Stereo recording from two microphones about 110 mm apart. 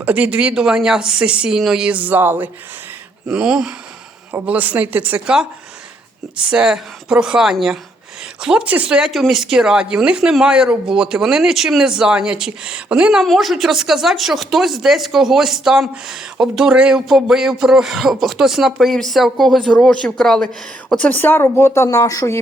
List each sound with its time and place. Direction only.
0.0 s speech: 10° right (ahead or behind); by 20.5 s 5° left (ahead or behind)
21.0 s speech: 15° left (ahead or behind); by 22.4 s 30° left (ahead or behind)